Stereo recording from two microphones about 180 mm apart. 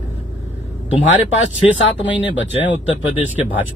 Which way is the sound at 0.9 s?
10° right (ahead or behind).